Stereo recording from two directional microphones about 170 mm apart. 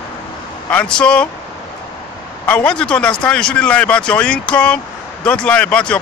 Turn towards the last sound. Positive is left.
turn(degrees=5)  # may be behind; listen again after turning